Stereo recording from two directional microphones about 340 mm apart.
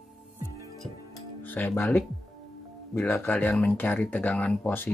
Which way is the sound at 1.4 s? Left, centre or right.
Centre.